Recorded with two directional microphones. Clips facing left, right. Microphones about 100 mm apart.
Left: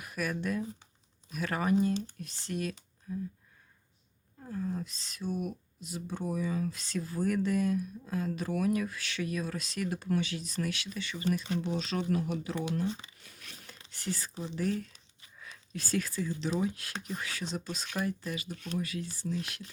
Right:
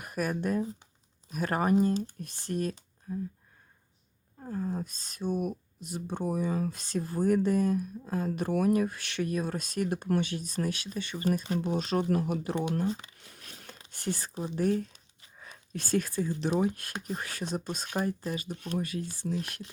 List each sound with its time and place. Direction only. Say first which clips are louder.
0.0 s speech: right 3 dB; 45° right (ahead or behind)
4.4 s speech: right 2 dB; 35° right (ahead or behind); by 7.2 s 50° right (ahead or behind)
7.3 s speech: right 4 dB; 40° right (ahead or behind)
12.6 s a sound: right 3 dB; 40° right (ahead or behind)
13.9 s speech: right 3 dB; 45° right (ahead or behind)
15.4 s a sound: even; 40° right (ahead or behind)
16.0 s speech: right 3 dB; 45° right (ahead or behind)
17.9 s speech: right 3 dB; 35° right (ahead or behind)